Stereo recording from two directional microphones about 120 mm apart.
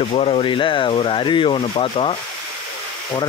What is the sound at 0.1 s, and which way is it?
Speech, 55° left (ahead or behind).